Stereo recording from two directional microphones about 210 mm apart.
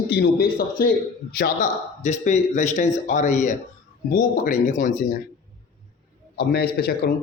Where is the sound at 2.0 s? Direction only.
35° left (ahead or behind).